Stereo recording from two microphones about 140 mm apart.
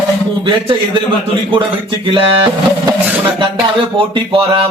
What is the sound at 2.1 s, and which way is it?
Speech, 40° right (ahead or behind).